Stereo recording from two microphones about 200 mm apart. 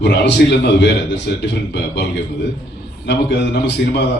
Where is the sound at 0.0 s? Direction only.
60° left (ahead or behind).